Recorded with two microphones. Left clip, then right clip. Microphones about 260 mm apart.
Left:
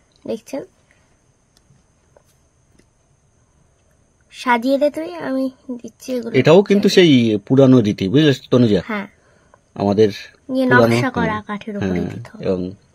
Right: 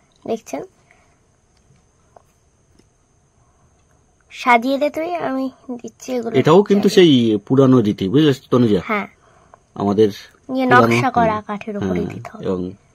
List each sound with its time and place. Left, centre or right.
0.3 s a woman's voice: centre
4.5 s a woman's voice: centre
6.4 s speech: centre
10.4 s a woman's voice: centre
12.4 s speech: centre